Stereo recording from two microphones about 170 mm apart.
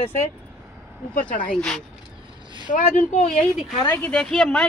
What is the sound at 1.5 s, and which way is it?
Speech, 5° left (ahead or behind).